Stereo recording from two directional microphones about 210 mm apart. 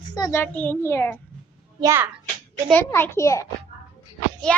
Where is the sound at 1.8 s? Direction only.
15° right (ahead or behind).